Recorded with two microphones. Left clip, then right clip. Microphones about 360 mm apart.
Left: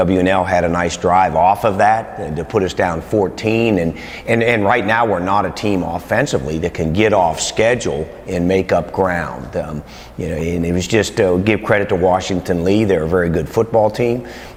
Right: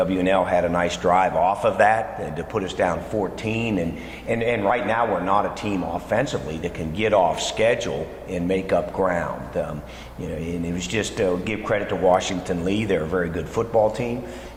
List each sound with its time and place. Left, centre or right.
0.0 s a man's voice: left
12.0 s speech: left